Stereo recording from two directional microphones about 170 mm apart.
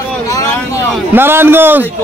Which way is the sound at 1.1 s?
15° right (ahead or behind).